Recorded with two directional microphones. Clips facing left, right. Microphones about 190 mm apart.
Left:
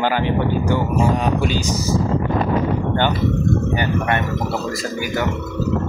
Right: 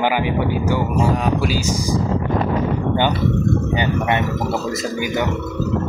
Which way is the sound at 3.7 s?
20° right (ahead or behind).